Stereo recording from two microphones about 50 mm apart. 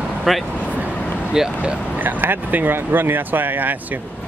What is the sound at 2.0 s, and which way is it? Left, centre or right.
Speech, right.